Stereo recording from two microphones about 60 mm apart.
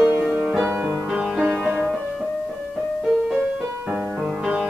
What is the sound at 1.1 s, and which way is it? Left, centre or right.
Music, centre.